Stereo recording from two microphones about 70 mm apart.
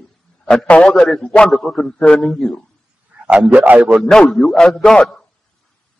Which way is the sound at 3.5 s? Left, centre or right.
Right.